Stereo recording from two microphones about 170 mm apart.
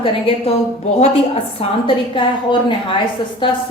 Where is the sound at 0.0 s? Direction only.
35° left (ahead or behind).